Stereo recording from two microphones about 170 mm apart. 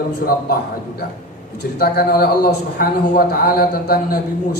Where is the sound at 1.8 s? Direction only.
65° left (ahead or behind).